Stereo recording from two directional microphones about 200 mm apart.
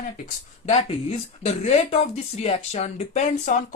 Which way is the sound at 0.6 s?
30° left (ahead or behind).